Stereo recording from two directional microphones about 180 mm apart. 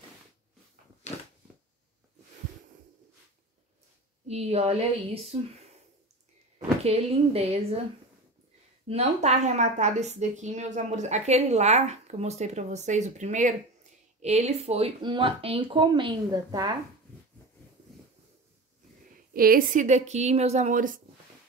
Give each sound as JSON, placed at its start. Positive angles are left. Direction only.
{"t": 1.0, "sound": "a sound", "side_deg": 40}
{"t": 4.3, "sound": "a woman's voice", "side_deg": -35}
{"t": 6.8, "sound": "a woman's voice", "side_deg": -35}
{"t": 8.8, "sound": "a woman's voice", "side_deg": -35}
{"t": 19.3, "sound": "a woman's voice", "side_deg": -55}